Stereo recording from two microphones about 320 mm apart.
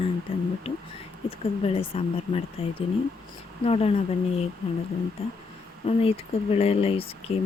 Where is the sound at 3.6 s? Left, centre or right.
Centre.